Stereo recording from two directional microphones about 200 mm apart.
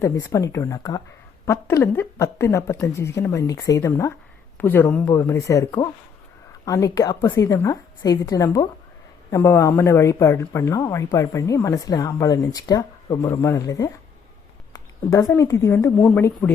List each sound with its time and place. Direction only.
0.0 s a woman's voice: 15° left (ahead or behind)